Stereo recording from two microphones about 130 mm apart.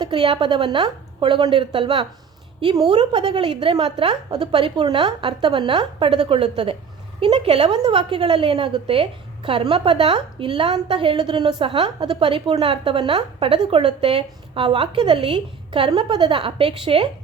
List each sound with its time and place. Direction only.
0.0 s a woman's voice: 40° right (ahead or behind)
7.4 s a woman's voice: 50° right (ahead or behind)
7.7 s a woman's voice: 40° right (ahead or behind)